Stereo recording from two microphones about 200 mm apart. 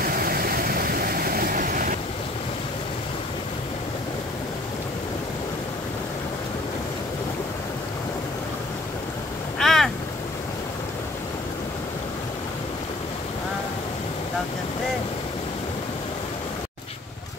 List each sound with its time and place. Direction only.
0.0 s vehicle: 50° right (ahead or behind)
9.6 s boat: centre (ahead or behind)